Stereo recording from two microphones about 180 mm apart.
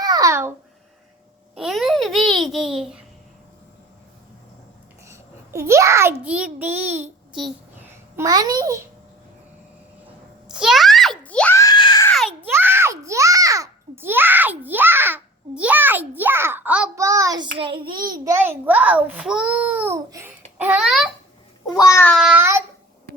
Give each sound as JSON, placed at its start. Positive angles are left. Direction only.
{"t": 0.0, "sound": "babbling", "side_deg": -20}
{"t": 1.5, "sound": "a child's voice", "side_deg": 0}
{"t": 5.0, "sound": "a child's voice", "side_deg": -15}
{"t": 8.1, "sound": "a child's voice", "side_deg": -20}
{"t": 10.5, "sound": "screaming", "side_deg": -5}
{"t": 12.4, "sound": "a sound", "side_deg": -10}
{"t": 16.9, "sound": "a child's voice", "side_deg": -20}
{"t": 21.8, "sound": "child singing", "side_deg": 15}
{"t": 22.1, "sound": "a child's voice", "side_deg": -5}